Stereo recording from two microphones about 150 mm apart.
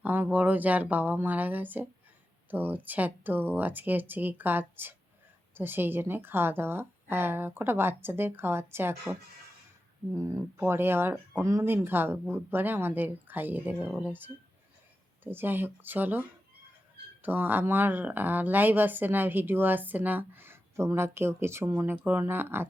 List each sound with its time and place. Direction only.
0.0 s speech: 10° right (ahead or behind)
17.2 s speech: 10° right (ahead or behind)